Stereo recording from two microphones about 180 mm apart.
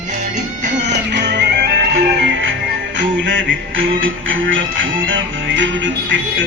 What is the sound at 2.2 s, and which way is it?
Music, 85° right.